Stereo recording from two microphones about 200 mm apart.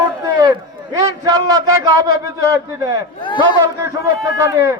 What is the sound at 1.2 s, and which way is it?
A man's voice, 15° right (ahead or behind).